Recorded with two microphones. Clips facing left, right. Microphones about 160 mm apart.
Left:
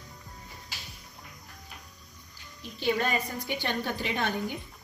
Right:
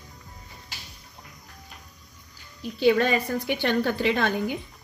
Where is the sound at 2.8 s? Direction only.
80° right.